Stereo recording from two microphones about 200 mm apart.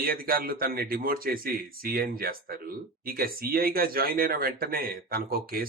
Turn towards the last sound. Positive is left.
turn(degrees=-45)  # may be behind; listen again after turning